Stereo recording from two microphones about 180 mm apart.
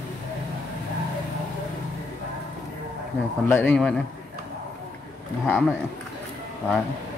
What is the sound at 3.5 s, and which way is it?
Speech, 10° left (ahead or behind).